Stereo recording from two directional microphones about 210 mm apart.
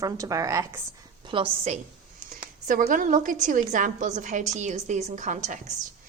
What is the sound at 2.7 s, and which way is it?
A woman's voice, 40° right (ahead or behind).